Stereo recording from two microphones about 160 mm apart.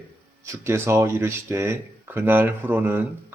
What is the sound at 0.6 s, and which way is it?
Speech, 15° right (ahead or behind).